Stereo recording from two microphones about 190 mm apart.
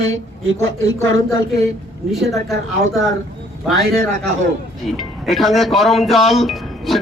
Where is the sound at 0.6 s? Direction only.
90° right.